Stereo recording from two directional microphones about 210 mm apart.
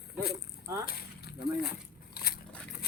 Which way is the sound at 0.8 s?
50° left (ahead or behind).